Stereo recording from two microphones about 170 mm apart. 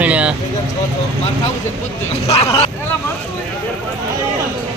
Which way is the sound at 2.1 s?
40° left (ahead or behind).